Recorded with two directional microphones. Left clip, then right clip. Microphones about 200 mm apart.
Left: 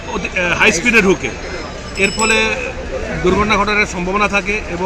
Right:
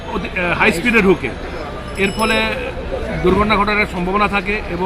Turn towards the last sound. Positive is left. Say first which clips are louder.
# left 1 dB
turn(degrees=5)  # may be behind; listen again after turning